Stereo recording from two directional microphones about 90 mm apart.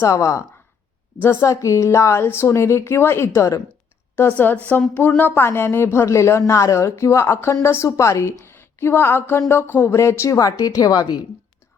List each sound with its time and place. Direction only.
0.0 s a woman's voice: 35° left (ahead or behind)
4.1 s a woman's voice: 20° left (ahead or behind); by 11.2 s 45° left (ahead or behind)